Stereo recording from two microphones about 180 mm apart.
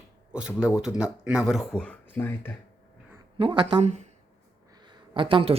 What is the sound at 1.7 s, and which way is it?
Speech, 5° left (ahead or behind).